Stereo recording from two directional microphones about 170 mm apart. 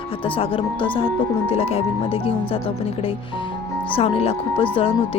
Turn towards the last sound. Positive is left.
turn(degrees=35)  # may be behind; listen again after turning